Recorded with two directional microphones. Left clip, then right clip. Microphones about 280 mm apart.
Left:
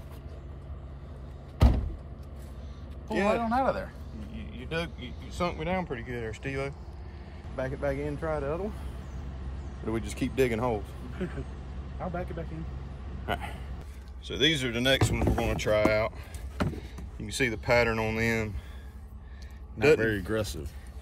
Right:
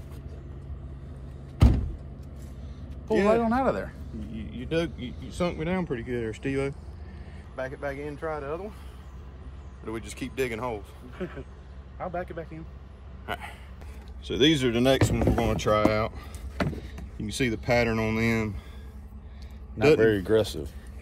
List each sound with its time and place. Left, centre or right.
1.6 s vehicle: left
3.1 s speech: left
3.4 s speech: centre
4.2 s speech: left
7.5 s speech: centre
9.8 s speech: centre
11.1 s speech: right
13.3 s a man's voice: centre
20.4 s speech: left